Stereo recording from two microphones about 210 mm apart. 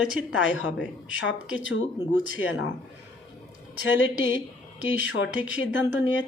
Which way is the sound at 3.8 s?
60° left (ahead or behind).